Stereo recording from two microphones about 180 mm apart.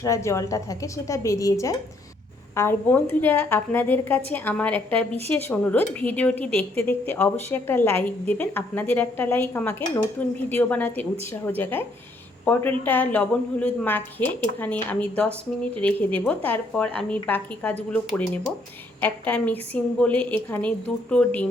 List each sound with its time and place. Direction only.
0.0 s a woman's voice: 15° left (ahead or behind)
18.9 s a woman's voice: 10° left (ahead or behind)